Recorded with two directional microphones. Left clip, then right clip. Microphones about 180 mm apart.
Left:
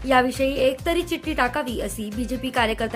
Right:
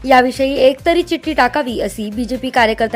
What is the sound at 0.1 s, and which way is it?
A woman's voice, 30° right (ahead or behind).